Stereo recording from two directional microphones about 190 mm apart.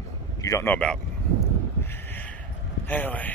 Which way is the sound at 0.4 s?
15° left (ahead or behind).